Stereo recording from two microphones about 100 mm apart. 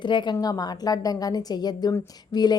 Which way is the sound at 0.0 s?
50° left (ahead or behind).